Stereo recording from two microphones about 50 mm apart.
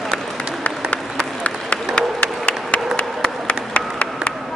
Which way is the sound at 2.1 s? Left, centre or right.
Left.